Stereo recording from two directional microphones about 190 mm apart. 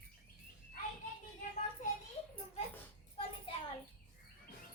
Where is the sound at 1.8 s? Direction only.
40° left (ahead or behind).